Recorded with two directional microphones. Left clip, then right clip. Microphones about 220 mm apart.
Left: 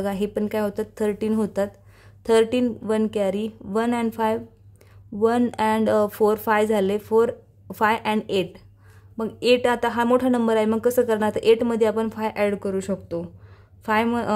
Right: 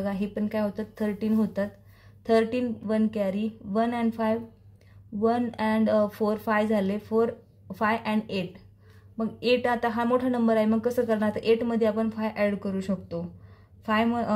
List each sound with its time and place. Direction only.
0.0 s speech: 40° left (ahead or behind)